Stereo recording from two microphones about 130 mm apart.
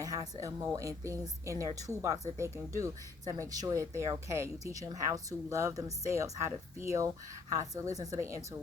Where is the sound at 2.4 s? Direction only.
25° right (ahead or behind).